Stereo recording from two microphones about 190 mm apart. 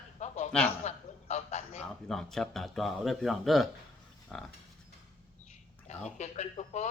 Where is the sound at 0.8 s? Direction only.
35° left (ahead or behind).